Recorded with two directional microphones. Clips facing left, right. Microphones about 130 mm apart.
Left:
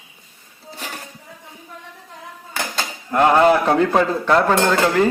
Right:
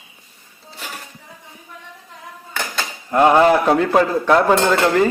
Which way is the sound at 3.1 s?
10° right (ahead or behind).